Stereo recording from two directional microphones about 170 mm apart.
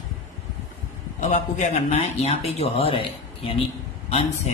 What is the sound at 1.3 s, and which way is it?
Speech, 40° left (ahead or behind).